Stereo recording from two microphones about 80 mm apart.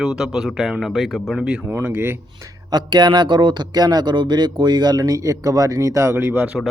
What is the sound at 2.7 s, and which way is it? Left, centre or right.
Speech, right.